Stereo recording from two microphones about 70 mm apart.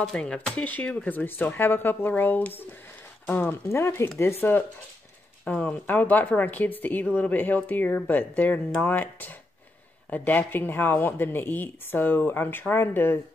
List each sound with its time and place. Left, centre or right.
0.0 s speech: centre
3.6 s speech: left
5.5 s speech: left